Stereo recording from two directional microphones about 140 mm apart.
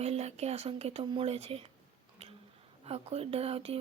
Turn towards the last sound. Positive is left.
turn(degrees=-45)  # may be behind; listen again after turning